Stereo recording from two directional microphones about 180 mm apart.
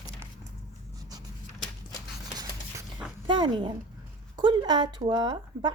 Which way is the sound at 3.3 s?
25° right (ahead or behind).